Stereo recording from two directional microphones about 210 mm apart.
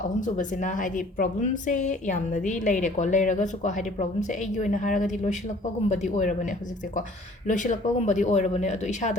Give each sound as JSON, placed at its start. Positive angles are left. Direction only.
{"t": 0.2, "sound": "a woman's voice", "side_deg": 40}